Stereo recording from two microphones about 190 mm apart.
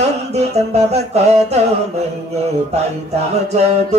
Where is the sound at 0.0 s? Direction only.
35° right (ahead or behind).